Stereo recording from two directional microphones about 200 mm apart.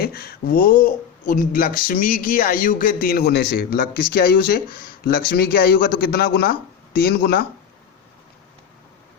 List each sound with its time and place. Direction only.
0.0 s speech: 50° left (ahead or behind)